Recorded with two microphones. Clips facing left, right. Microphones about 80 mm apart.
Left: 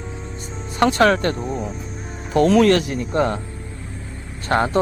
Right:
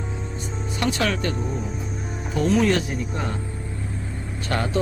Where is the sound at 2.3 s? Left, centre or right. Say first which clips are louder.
Left 6 dB; left.